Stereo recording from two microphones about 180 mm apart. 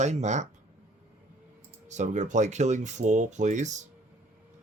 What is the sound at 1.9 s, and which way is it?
Speech, 40° right (ahead or behind).